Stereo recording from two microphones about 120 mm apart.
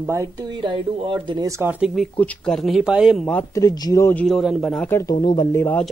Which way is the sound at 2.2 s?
10° left (ahead or behind).